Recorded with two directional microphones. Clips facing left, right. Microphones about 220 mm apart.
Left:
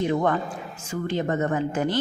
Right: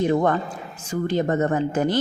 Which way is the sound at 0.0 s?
40° right (ahead or behind).